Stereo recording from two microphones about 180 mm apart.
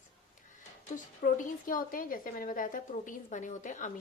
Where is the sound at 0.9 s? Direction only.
45° left (ahead or behind).